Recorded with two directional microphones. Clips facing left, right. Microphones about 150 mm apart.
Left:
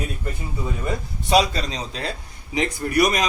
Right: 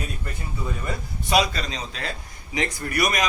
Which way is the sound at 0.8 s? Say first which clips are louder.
Left 4 dB; 30° left (ahead or behind).